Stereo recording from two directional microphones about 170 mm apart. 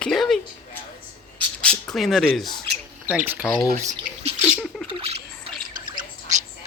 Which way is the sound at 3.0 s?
10° right (ahead or behind).